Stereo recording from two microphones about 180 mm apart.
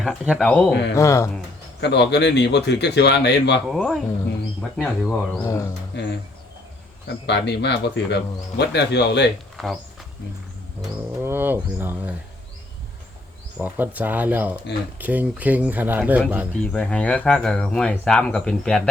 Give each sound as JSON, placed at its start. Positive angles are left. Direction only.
{"t": 0.0, "sound": "speech", "side_deg": 5}
{"t": 0.7, "sound": "speech", "side_deg": 70}
{"t": 0.9, "sound": "speech", "side_deg": 15}
{"t": 1.8, "sound": "speech", "side_deg": 70}
{"t": 3.7, "sound": "speech", "side_deg": 0}
{"t": 5.4, "sound": "speech", "side_deg": 15}
{"t": 5.9, "sound": "speech", "side_deg": 75}
{"t": 7.3, "sound": "speech", "side_deg": 70}
{"t": 9.6, "sound": "speech", "side_deg": 0}
{"t": 11.2, "sound": "speech", "side_deg": -10}
{"t": 13.6, "sound": "speech", "side_deg": -10}
{"t": 16.7, "sound": "speech", "side_deg": 5}